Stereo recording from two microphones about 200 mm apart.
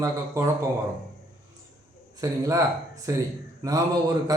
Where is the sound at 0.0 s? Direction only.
15° right (ahead or behind).